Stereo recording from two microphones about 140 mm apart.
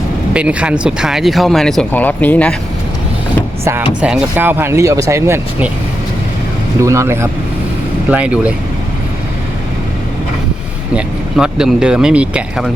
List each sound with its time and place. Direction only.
0.3 s speech: 10° right (ahead or behind); by 2.6 s 10° left (ahead or behind)
3.6 s speech: 20° right (ahead or behind)
6.8 s speech: 20° right (ahead or behind)
8.1 s speech: 10° right (ahead or behind)
10.9 s speech: 5° right (ahead or behind)